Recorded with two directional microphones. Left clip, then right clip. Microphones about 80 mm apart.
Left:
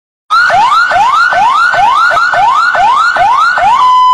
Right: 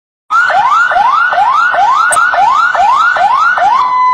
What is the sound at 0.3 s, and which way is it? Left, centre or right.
Emergency vehicle, centre.